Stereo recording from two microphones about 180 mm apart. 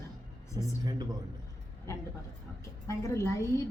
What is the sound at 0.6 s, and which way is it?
Speech, 25° right (ahead or behind).